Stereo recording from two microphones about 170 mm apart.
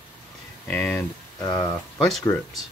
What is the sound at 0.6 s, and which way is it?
Speech, 10° left (ahead or behind).